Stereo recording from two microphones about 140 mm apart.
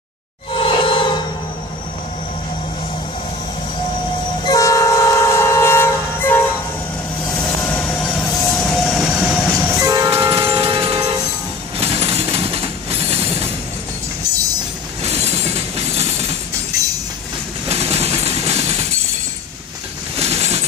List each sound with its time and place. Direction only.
0.5 s music: 40° left (ahead or behind)
4.5 s train: 25° left (ahead or behind); by 9.7 s centre (ahead or behind)
9.7 s train: 20° right (ahead or behind)
10.6 s train: 40° right (ahead or behind)
15.0 s train: 50° right (ahead or behind)
17.6 s vehicle: 45° right (ahead or behind)
20.2 s a sound: 45° right (ahead or behind)